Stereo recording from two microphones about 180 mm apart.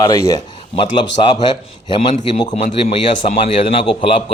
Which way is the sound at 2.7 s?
35° left (ahead or behind).